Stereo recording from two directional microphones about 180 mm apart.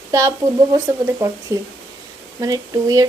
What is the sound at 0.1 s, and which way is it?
Speech, 20° right (ahead or behind).